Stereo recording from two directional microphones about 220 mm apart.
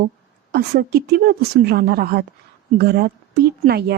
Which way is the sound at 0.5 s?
45° right (ahead or behind).